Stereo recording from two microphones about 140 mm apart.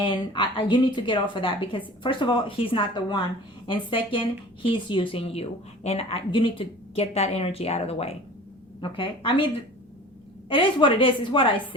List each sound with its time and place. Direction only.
0.0 s a woman's voice: 35° left (ahead or behind)
10.5 s a woman's voice: 35° left (ahead or behind)